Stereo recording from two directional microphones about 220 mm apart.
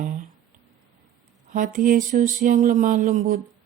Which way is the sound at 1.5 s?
35° right (ahead or behind).